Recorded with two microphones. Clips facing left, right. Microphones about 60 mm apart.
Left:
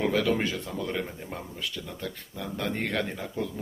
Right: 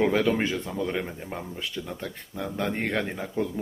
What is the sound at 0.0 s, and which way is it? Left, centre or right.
Speech, right.